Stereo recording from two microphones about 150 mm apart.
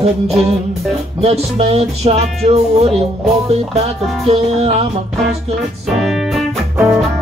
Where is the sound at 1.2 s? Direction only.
45° right (ahead or behind).